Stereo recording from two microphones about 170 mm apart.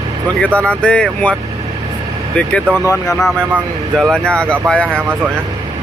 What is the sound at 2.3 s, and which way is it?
Speech, 5° left (ahead or behind).